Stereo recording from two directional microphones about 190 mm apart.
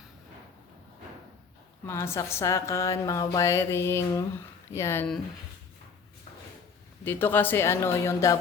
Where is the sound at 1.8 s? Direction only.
15° left (ahead or behind).